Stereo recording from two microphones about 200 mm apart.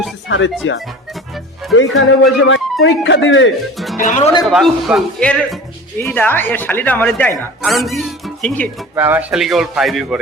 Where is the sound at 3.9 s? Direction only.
40° left (ahead or behind).